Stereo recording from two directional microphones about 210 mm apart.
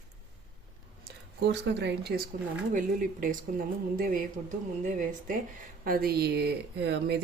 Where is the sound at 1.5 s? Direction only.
55° right (ahead or behind).